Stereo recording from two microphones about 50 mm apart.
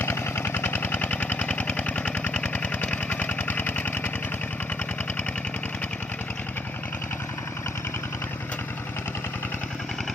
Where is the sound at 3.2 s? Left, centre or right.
Left.